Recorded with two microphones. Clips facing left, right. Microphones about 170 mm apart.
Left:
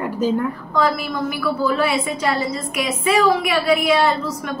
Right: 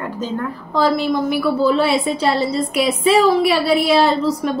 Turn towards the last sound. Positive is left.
turn(degrees=-30)  # may be behind; listen again after turning